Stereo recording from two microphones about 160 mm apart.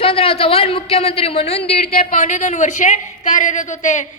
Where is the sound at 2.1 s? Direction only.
50° left (ahead or behind).